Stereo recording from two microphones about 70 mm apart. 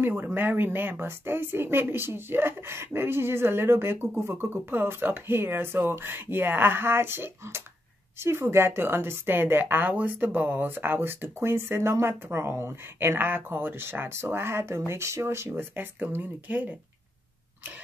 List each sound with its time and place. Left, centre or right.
0.0 s speech: right